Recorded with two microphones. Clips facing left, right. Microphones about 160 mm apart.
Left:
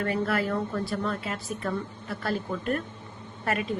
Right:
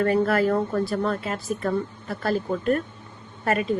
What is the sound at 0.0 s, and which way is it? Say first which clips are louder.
A woman's voice: right 7 dB; 45° right (ahead or behind).